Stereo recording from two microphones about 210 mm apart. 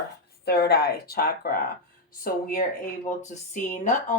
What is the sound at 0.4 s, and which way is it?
Speech, 50° left (ahead or behind).